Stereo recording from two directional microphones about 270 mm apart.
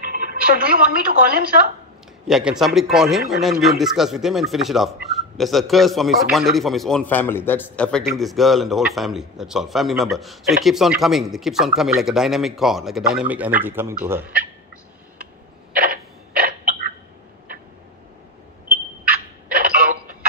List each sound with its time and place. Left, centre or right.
0.1 s a woman's voice: right
2.2 s a man's voice: centre
15.7 s a sound: right